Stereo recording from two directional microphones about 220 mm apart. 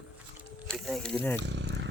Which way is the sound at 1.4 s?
50° right (ahead or behind).